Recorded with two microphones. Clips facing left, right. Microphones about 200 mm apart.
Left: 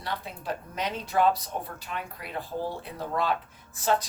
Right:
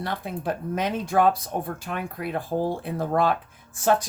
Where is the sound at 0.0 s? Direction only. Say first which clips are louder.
Right 6 dB; 55° right (ahead or behind).